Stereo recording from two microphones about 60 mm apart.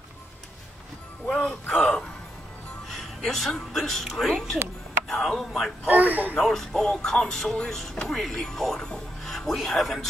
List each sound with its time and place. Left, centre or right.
1.7 s speech: centre
5.9 s speech: right
6.3 s speech: centre